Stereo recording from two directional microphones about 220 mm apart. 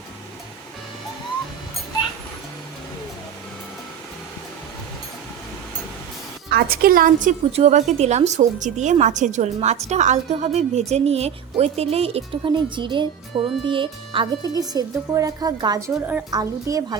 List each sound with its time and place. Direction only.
6.5 s a woman's voice: 45° right (ahead or behind); by 17.0 s 15° right (ahead or behind)